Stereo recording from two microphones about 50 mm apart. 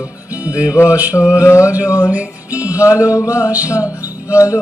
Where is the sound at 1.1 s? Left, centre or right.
Left.